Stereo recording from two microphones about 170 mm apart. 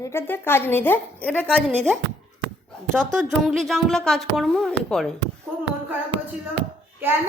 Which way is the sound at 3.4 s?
Centre (ahead or behind).